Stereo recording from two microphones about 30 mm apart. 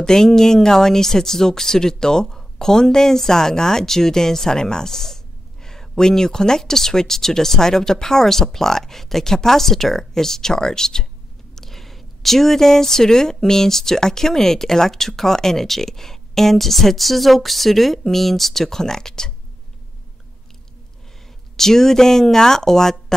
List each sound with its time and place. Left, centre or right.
0.0 s speech: centre
11.5 s speech: centre
21.5 s speech: centre